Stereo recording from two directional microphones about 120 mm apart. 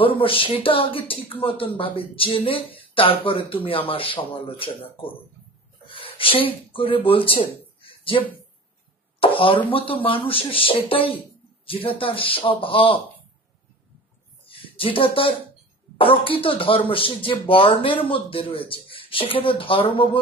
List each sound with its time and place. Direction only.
0.0 s speech: 45° left (ahead or behind)
5.9 s speech: 50° left (ahead or behind)
7.8 s a sound: 45° left (ahead or behind)
9.7 s speech: 50° left (ahead or behind)
14.4 s a sound: 50° left (ahead or behind)
16.0 s speech: 50° left (ahead or behind)